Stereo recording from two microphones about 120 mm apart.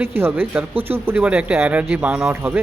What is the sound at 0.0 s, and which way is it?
Speech, 20° right (ahead or behind).